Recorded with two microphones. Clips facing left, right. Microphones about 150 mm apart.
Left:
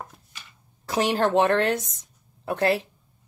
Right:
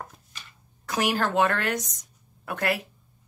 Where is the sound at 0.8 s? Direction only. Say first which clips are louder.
Left 3 dB; 30° left (ahead or behind).